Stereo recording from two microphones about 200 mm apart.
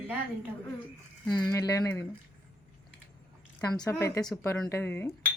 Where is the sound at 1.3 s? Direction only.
20° left (ahead or behind).